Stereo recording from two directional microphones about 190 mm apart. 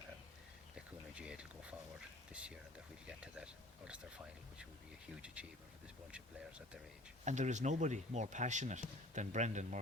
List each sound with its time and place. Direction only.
0.8 s a sound: 5° right (ahead or behind)
5.2 s speech: 5° right (ahead or behind)
7.3 s speech: 40° right (ahead or behind)